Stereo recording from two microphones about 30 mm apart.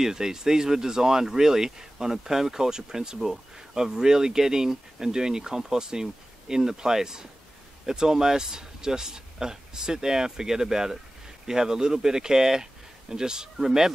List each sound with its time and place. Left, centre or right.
0.0 s speech: centre